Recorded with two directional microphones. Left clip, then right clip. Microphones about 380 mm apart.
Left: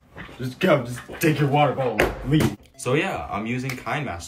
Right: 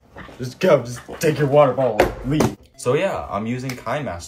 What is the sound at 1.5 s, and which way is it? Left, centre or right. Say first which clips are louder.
Speech: right 8 dB; right.